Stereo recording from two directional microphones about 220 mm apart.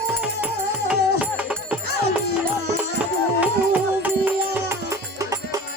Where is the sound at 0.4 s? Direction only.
5° right (ahead or behind).